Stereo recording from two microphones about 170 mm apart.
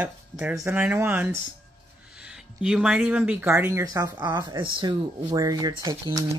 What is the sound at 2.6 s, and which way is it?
Speech, 5° right (ahead or behind).